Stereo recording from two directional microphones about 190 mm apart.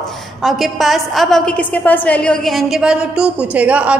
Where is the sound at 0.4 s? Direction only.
Centre (ahead or behind).